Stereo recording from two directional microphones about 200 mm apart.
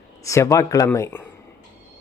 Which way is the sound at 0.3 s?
15° left (ahead or behind).